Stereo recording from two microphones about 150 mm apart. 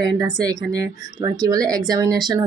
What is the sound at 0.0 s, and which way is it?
Speech, 25° right (ahead or behind).